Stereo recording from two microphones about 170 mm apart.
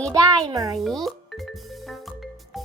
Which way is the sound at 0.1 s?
20° right (ahead or behind).